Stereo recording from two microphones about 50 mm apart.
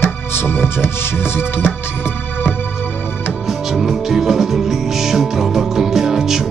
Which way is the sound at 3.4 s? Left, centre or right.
Centre.